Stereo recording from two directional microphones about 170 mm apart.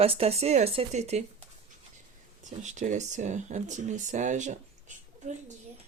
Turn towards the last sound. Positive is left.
turn(degrees=-45)  # may be behind; listen again after turning